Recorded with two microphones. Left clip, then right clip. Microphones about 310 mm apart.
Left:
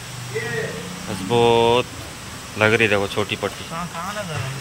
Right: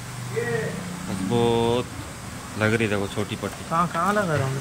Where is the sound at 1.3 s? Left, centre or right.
Centre.